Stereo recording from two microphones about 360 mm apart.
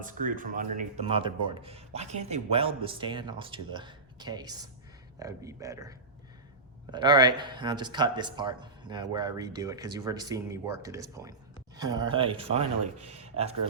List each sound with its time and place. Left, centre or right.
0.0 s speech: right
6.9 s speech: centre